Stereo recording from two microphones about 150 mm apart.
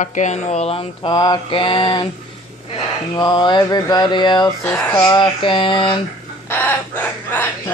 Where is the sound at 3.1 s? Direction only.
30° left (ahead or behind).